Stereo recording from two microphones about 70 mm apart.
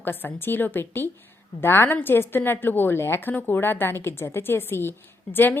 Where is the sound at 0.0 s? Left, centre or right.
Left.